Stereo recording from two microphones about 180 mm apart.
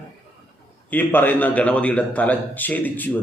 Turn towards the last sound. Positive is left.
turn(degrees=10)  # may be behind; listen again after turning